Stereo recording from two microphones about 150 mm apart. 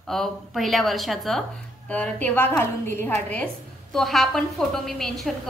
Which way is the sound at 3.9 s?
Centre (ahead or behind).